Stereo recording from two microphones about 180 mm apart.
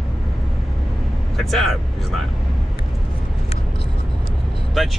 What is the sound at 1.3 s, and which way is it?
Speech, centre (ahead or behind).